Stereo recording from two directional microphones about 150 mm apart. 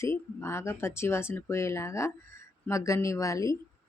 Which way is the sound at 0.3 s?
15° left (ahead or behind).